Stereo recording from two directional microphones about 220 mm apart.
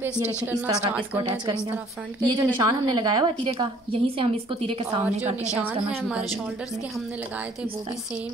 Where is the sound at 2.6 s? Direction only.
20° right (ahead or behind).